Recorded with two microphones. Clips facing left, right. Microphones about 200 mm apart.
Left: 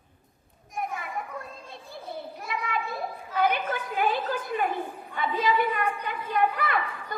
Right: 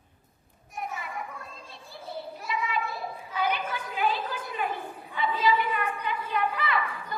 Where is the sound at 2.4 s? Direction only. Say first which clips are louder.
Right 1 dB; 55° left (ahead or behind).